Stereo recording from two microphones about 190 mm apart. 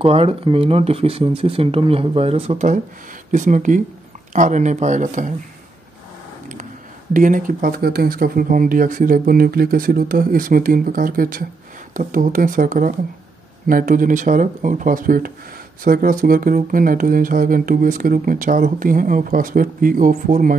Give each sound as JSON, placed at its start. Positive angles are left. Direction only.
{"t": 0.0, "sound": "speech", "side_deg": -30}
{"t": 7.2, "sound": "speech", "side_deg": -45}